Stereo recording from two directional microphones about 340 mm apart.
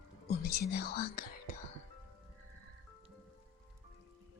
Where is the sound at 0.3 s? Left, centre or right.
Left.